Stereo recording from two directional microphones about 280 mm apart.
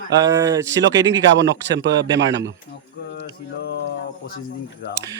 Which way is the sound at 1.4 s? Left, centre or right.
Right.